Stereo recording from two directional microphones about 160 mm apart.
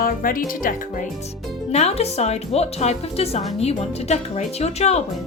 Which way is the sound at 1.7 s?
40° left (ahead or behind).